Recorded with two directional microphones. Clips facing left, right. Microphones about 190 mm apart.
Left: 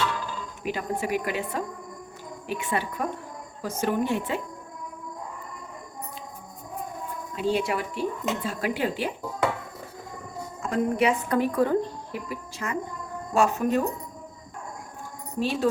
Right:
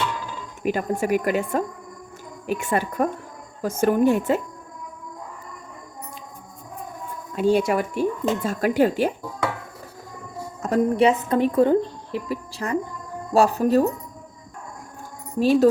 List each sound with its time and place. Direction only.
0.6 s a woman's voice: 50° right (ahead or behind)
7.3 s a woman's voice: 45° right (ahead or behind)
10.6 s speech: 35° right (ahead or behind)